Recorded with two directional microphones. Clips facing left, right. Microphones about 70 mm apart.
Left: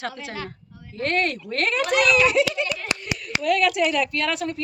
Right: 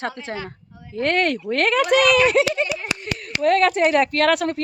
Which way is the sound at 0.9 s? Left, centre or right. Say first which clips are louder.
Right 4 dB; right.